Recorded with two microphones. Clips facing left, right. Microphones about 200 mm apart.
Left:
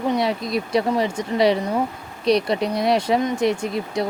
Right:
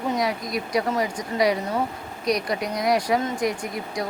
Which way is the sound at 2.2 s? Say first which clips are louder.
Left 6 dB; 30° left (ahead or behind).